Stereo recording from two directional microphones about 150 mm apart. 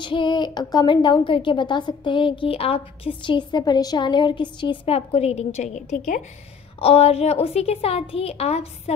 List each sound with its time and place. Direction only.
0.0 s a woman's voice: 30° left (ahead or behind); by 6.2 s 55° left (ahead or behind)
6.8 s a woman's voice: 40° left (ahead or behind)